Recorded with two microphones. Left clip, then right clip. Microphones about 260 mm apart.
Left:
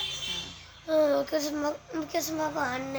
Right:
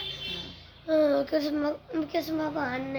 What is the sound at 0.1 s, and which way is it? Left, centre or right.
A child's voice, left.